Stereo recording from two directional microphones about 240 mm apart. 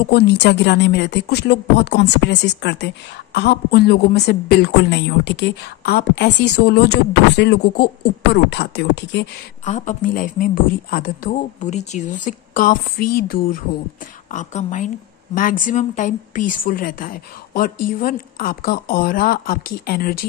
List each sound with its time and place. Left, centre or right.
0.1 s a woman's voice: left
9.7 s a woman's voice: left